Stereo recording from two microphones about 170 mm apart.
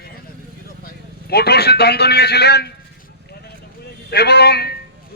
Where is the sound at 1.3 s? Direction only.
70° left (ahead or behind).